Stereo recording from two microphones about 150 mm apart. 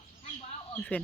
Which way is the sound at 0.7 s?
10° left (ahead or behind).